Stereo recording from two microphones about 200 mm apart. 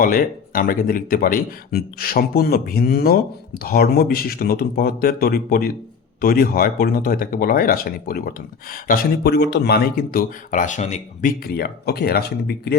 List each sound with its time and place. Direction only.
0.0 s speech: 45° left (ahead or behind)